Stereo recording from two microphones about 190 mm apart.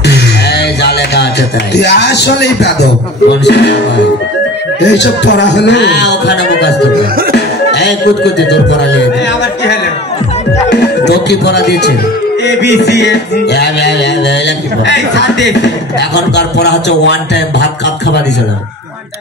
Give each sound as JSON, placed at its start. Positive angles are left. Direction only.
{"t": 0.0, "sound": "music", "side_deg": 60}
{"t": 1.8, "sound": "a man's voice", "side_deg": 60}
{"t": 10.7, "sound": "speech", "side_deg": 65}
{"t": 12.4, "sound": "music", "side_deg": 65}
{"t": 14.9, "sound": "a man's voice", "side_deg": 65}